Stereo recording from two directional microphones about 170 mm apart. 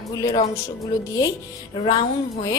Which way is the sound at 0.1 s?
20° left (ahead or behind).